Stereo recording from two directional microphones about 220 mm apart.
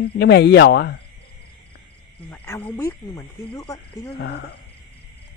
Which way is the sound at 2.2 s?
10° left (ahead or behind).